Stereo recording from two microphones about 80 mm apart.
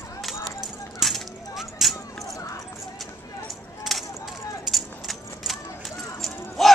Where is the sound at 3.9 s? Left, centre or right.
Centre.